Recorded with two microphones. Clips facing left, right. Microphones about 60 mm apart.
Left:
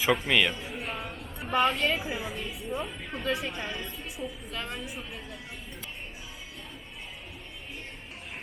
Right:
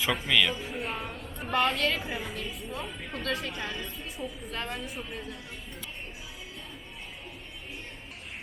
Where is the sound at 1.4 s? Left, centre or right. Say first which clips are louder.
Left 1 dB; centre.